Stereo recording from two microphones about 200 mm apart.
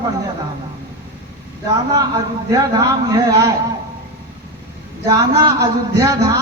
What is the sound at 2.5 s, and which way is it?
A man's voice, 20° right (ahead or behind).